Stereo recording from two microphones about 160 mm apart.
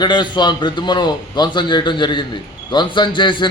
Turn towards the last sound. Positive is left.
turn(degrees=30)  # may be behind; listen again after turning